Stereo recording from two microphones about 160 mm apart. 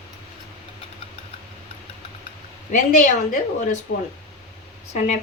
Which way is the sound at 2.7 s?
55° left (ahead or behind).